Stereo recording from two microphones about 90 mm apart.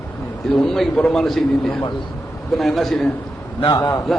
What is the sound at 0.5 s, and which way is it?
A man's voice, 5° left (ahead or behind).